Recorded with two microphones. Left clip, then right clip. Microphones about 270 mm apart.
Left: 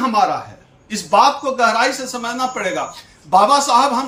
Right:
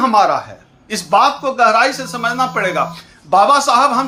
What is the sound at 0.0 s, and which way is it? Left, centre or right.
Speech, centre.